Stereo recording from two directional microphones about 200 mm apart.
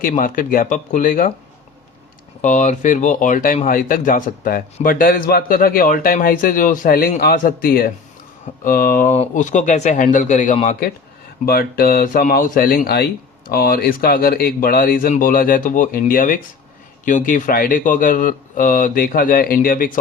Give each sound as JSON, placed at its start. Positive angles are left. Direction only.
{"t": 0.0, "sound": "speech", "side_deg": 45}
{"t": 2.4, "sound": "speech", "side_deg": 40}
{"t": 11.4, "sound": "speech", "side_deg": 50}